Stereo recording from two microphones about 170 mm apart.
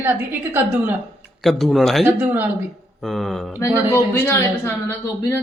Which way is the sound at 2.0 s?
15° right (ahead or behind).